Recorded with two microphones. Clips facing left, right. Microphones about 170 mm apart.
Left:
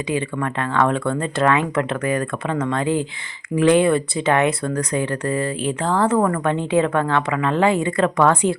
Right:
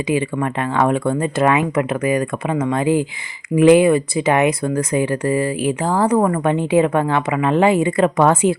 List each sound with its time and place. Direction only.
0.1 s speech: 15° right (ahead or behind)